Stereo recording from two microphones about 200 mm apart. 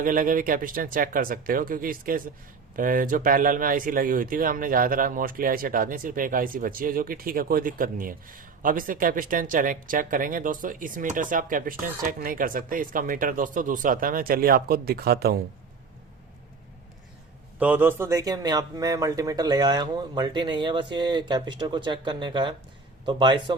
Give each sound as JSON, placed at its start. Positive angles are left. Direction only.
{"t": 0.0, "sound": "speech", "side_deg": -45}
{"t": 17.6, "sound": "speech", "side_deg": -10}